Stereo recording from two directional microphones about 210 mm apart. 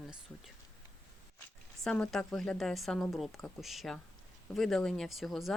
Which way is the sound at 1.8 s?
5° left (ahead or behind).